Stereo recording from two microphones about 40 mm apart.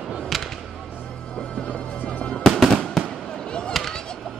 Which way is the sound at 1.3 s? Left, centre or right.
Left.